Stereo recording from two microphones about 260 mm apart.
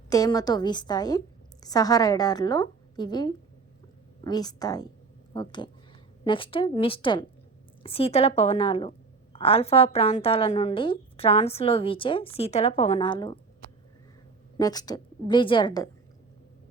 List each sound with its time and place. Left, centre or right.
0.1 s a woman's voice: centre
14.6 s a woman's voice: centre